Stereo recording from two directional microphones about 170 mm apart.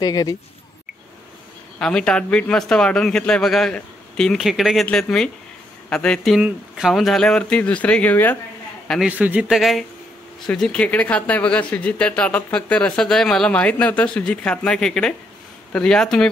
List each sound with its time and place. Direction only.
0.0 s speech: 20° left (ahead or behind)
1.8 s a man's voice: 5° left (ahead or behind)
9.1 s speech: 10° right (ahead or behind)